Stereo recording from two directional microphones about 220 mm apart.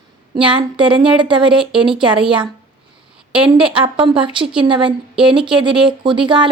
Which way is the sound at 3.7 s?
25° right (ahead or behind).